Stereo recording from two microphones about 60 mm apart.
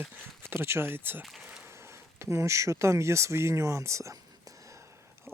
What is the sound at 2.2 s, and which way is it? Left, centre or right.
Speech, right.